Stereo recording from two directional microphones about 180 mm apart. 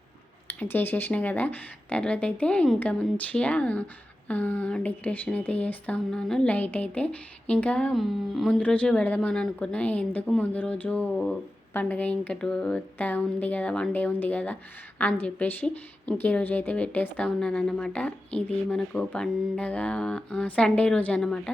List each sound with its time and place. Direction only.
0.4 s speech: 10° left (ahead or behind)